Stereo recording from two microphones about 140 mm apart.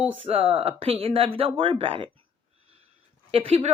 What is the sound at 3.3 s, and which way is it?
Speech, 45° right (ahead or behind).